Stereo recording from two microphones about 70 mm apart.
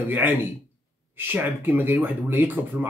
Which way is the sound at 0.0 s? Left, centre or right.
Right.